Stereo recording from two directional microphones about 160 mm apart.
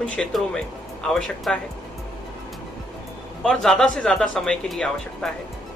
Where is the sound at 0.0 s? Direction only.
5° left (ahead or behind).